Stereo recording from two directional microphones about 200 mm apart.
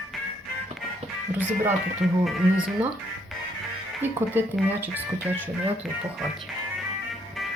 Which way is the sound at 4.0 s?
10° right (ahead or behind).